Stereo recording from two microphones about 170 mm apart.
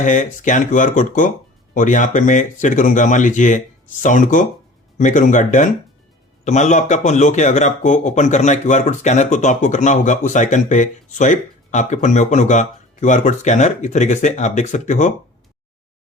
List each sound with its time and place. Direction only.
0.0 s a man's voice: 45° left (ahead or behind)